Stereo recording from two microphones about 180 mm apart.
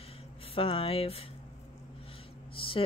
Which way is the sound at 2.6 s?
30° left (ahead or behind).